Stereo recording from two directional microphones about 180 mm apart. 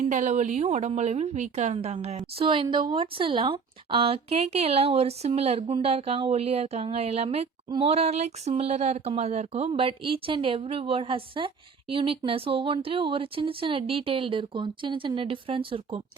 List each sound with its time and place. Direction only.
0.0 s speech: 45° right (ahead or behind); by 16.0 s 30° right (ahead or behind)